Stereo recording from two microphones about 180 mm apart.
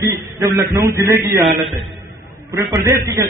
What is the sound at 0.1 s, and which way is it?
A man's voice, 10° right (ahead or behind).